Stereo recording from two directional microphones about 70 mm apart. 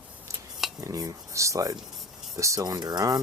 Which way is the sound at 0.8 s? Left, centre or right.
Right.